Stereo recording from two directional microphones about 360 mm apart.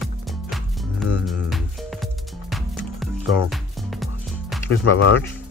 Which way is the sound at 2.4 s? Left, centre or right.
Centre.